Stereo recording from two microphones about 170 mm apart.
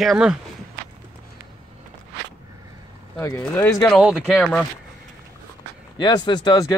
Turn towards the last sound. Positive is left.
turn(degrees=20)  # may be behind; listen again after turning